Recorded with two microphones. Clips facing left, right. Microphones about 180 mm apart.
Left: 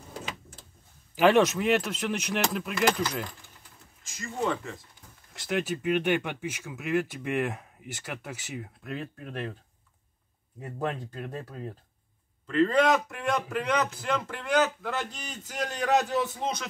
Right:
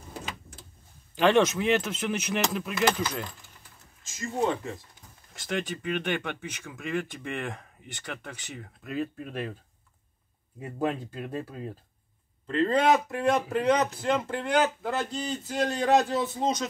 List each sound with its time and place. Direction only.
1.1 s speech: 5° left (ahead or behind)
4.2 s a man's voice: 30° right (ahead or behind)
5.3 s speech: centre (ahead or behind)
8.9 s speech: 5° right (ahead or behind)
10.6 s speech: 5° right (ahead or behind)
12.4 s a man's voice: 30° right (ahead or behind)